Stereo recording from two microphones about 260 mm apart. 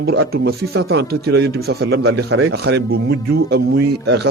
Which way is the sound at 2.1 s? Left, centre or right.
Right.